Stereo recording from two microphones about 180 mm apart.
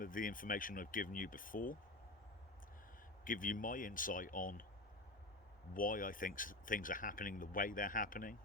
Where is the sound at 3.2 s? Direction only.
50° left (ahead or behind).